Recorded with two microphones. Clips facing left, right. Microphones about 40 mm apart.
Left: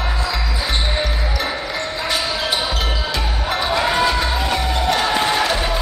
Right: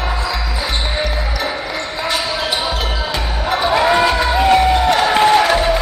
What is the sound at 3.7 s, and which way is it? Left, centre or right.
Music, centre.